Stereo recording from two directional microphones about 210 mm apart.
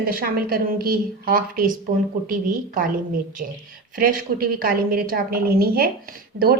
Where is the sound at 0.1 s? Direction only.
45° right (ahead or behind).